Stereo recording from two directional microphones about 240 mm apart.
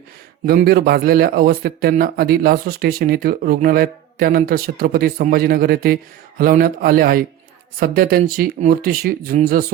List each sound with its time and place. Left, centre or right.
0.4 s a man's voice: right